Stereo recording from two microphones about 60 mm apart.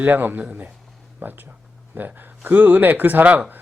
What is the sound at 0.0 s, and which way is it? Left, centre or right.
Speech, right.